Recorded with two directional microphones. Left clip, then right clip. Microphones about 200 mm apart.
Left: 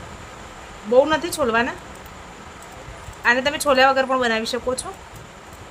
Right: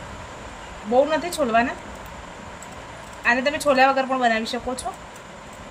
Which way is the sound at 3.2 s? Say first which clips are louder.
Left 2 dB; 40° left (ahead or behind).